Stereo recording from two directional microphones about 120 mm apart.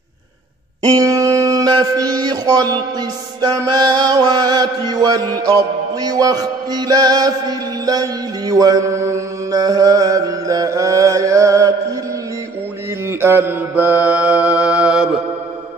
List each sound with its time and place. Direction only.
0.8 s music: 30° right (ahead or behind)
13.2 s mantra: 20° right (ahead or behind)